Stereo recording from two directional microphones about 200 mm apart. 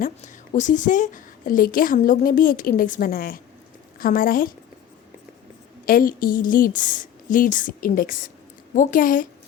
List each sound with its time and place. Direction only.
0.0 s a woman's voice: 35° left (ahead or behind)
5.8 s a woman's voice: 45° left (ahead or behind)